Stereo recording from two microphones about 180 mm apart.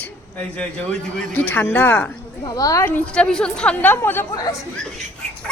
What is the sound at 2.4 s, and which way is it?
Speech, 20° left (ahead or behind).